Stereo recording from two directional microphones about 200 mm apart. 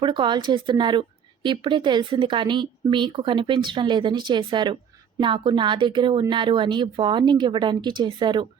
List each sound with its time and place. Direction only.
0.0 s a woman's voice: 25° right (ahead or behind)